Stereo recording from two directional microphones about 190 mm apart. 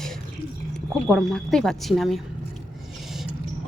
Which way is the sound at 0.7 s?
Centre (ahead or behind).